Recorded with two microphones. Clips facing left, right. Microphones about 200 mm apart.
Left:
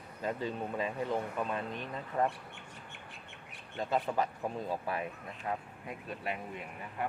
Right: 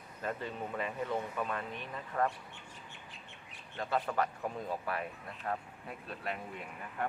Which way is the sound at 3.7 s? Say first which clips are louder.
Left 1 dB; 20° left (ahead or behind).